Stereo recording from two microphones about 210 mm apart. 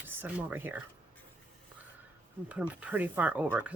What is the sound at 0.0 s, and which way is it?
Speech, 10° right (ahead or behind).